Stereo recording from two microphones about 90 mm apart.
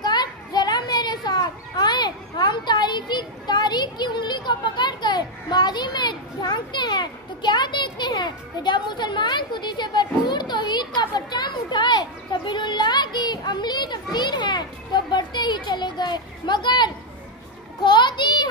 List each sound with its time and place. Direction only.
0.0 s a child's voice: 50° left (ahead or behind)